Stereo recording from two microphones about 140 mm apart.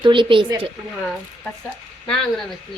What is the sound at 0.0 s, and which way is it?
Speech, 35° right (ahead or behind).